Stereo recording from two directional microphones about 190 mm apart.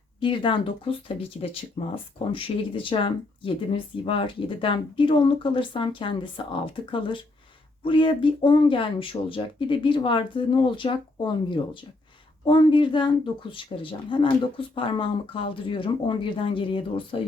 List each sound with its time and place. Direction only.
0.2 s speech: 25° left (ahead or behind)